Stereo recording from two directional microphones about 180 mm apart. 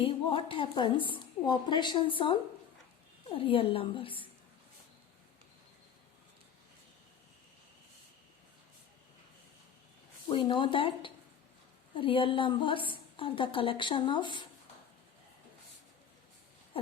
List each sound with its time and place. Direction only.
0.0 s a woman's voice: 30° left (ahead or behind)
10.2 s a woman's voice: 25° left (ahead or behind)